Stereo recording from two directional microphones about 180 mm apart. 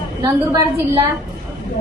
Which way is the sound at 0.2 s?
20° right (ahead or behind).